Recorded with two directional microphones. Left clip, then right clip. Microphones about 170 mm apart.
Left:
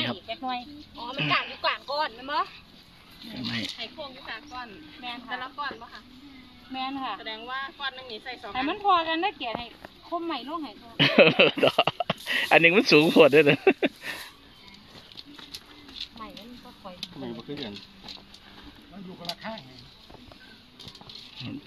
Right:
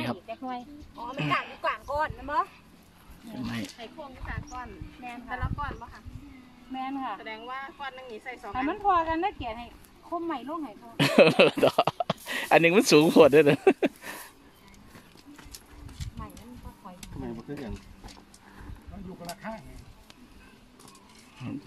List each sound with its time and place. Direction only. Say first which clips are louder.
0.0 s speech: left 4 dB; 15° right (ahead or behind)
3.4 s speech: left 7 dB; 5° right (ahead or behind)
6.7 s speech: left 2 dB; 15° right (ahead or behind)
7.2 s speech: left 3 dB; 5° right (ahead or behind)
19.2 s speech: left 3 dB; 10° right (ahead or behind)